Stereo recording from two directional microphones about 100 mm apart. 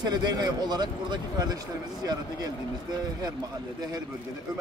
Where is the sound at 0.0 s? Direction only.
45° right (ahead or behind).